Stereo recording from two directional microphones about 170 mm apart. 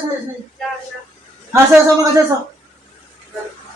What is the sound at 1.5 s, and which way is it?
Speech, 20° right (ahead or behind).